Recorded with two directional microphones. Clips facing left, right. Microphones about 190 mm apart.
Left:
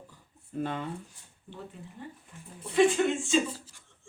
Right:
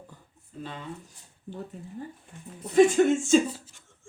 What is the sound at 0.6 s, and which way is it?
Speech, 55° left (ahead or behind).